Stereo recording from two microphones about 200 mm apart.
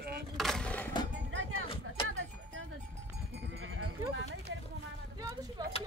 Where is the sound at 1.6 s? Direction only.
25° left (ahead or behind).